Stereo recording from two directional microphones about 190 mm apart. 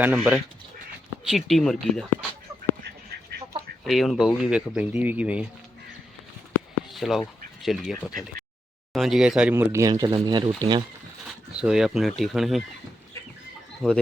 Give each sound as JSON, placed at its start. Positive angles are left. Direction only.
{"t": 0.0, "sound": "speech", "side_deg": -10}
{"t": 3.8, "sound": "speech", "side_deg": 0}
{"t": 6.5, "sound": "a sound", "side_deg": 0}
{"t": 7.6, "sound": "speech", "side_deg": 0}
{"t": 11.3, "sound": "speech", "side_deg": -5}
{"t": 13.8, "sound": "speech", "side_deg": 5}